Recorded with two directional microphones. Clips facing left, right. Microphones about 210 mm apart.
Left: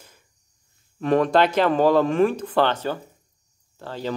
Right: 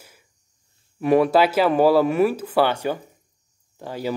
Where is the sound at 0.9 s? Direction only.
10° right (ahead or behind).